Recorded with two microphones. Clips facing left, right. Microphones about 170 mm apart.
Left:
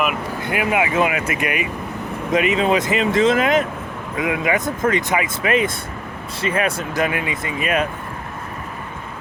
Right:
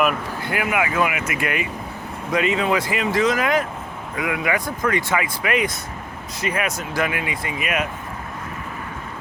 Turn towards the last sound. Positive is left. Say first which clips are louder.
# left 3 dB
turn(degrees=30)  # may be behind; listen again after turning